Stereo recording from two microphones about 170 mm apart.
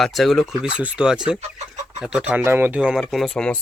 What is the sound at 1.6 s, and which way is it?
Chicken, 40° right (ahead or behind).